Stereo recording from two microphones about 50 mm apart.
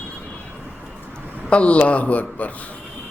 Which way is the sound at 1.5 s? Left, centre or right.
Left.